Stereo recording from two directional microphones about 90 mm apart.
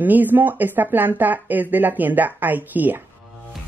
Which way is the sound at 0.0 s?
20° right (ahead or behind).